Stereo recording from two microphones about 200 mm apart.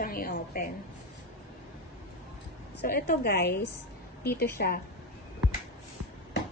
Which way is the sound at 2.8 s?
45° left (ahead or behind).